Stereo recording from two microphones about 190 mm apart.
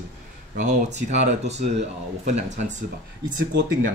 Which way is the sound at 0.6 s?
40° right (ahead or behind).